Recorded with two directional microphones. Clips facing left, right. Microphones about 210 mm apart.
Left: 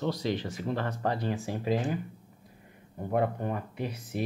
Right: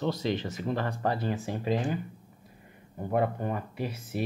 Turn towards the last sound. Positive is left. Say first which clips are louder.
# right 1 dB
turn(degrees=-5)  # may be behind; listen again after turning